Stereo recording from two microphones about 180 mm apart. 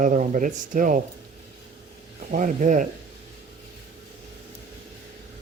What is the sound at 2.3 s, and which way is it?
Speech, 45° right (ahead or behind).